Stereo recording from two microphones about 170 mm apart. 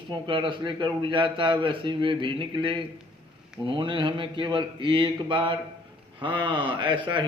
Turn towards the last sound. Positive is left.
turn(degrees=-30)  # may be behind; listen again after turning